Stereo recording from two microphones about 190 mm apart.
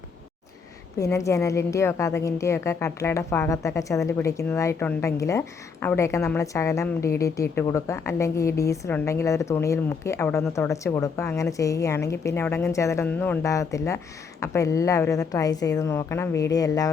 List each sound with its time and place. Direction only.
0.9 s a woman's voice: 15° left (ahead or behind)